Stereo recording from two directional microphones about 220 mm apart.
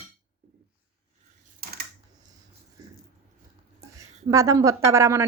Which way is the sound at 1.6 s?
45° right (ahead or behind).